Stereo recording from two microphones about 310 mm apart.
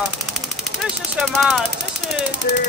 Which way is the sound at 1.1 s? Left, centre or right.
Centre.